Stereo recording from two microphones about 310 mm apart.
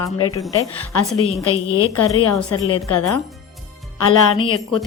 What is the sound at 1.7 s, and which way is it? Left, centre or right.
A woman's voice, left.